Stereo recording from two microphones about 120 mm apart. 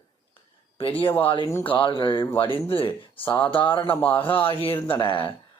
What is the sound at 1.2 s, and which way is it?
Speech, 45° left (ahead or behind).